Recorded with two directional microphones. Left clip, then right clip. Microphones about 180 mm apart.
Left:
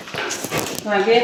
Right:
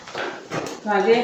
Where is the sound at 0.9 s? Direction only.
40° left (ahead or behind).